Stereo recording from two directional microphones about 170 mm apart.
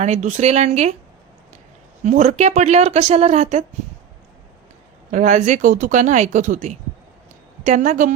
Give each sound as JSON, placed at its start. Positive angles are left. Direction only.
{"t": 0.0, "sound": "speech", "side_deg": -45}
{"t": 2.0, "sound": "speech", "side_deg": -45}
{"t": 5.1, "sound": "speech", "side_deg": -45}